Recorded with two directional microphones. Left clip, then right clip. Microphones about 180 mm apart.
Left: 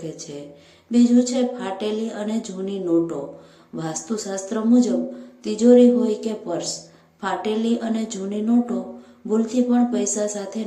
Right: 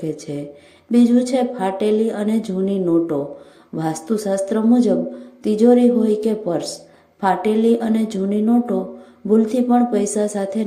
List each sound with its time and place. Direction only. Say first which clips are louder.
0.0 s speech: right 7 dB; 45° right (ahead or behind)